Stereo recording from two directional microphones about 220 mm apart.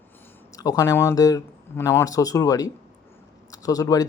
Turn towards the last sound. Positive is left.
turn(degrees=15)  # may be behind; listen again after turning